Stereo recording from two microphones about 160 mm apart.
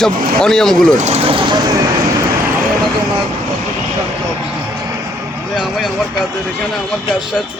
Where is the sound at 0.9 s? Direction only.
45° right (ahead or behind); by 2.2 s 25° right (ahead or behind).